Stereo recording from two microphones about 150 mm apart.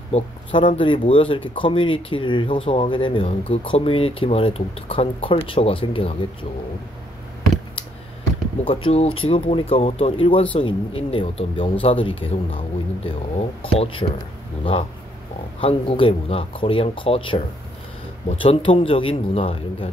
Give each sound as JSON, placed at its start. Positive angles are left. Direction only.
{"t": 0.1, "sound": "speech", "side_deg": 35}
{"t": 8.6, "sound": "speech", "side_deg": 40}
{"t": 18.4, "sound": "speech", "side_deg": 35}